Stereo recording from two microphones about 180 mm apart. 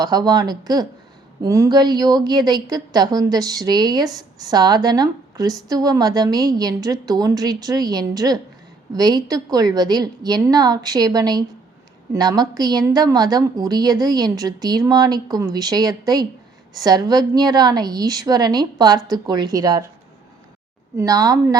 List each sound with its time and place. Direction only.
0.0 s a woman's voice: 20° right (ahead or behind)
20.9 s a woman's voice: 20° right (ahead or behind)